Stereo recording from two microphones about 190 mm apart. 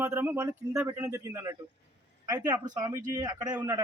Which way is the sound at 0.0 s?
10° right (ahead or behind).